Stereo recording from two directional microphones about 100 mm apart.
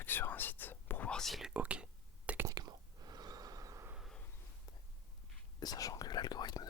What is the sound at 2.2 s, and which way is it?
Whispering, 20° right (ahead or behind).